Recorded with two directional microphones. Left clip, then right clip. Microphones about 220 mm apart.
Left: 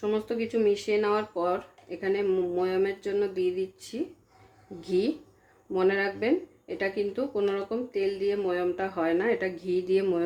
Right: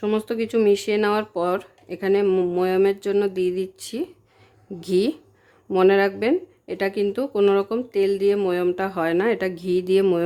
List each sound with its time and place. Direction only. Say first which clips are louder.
0.0 s speech: right 5 dB; 45° right (ahead or behind)